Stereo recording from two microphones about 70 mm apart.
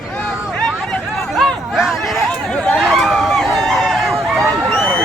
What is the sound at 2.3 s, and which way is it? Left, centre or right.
Chatter, centre.